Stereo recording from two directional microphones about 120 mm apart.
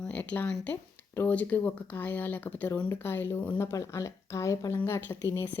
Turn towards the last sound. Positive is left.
turn(degrees=20)  # may be behind; listen again after turning